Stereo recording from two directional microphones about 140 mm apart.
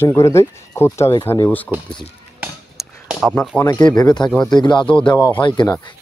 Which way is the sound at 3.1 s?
Centre (ahead or behind).